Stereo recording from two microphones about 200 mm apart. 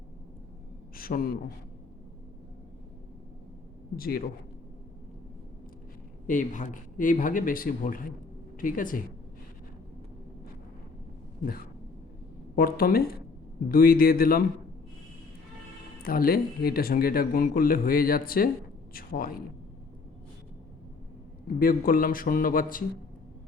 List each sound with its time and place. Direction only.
0.9 s a man's voice: 45° left (ahead or behind)
3.9 s speech: 50° left (ahead or behind)
6.2 s speech: 40° left (ahead or behind)
12.5 s speech: 50° left (ahead or behind)
16.0 s speech: 45° left (ahead or behind)
21.6 s speech: 45° left (ahead or behind)